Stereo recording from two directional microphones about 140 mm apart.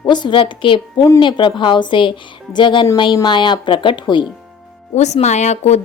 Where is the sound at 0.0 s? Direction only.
35° left (ahead or behind).